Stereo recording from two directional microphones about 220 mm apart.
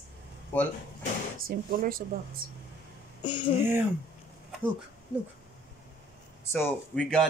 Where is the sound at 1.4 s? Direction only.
40° right (ahead or behind).